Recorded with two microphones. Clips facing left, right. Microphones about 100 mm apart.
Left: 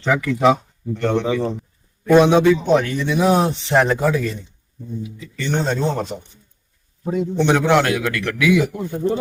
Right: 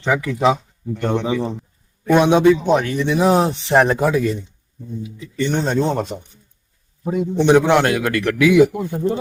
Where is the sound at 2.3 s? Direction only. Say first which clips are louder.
Right 1 dB; 20° right (ahead or behind).